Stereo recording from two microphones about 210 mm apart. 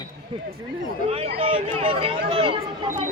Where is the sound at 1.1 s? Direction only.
30° right (ahead or behind).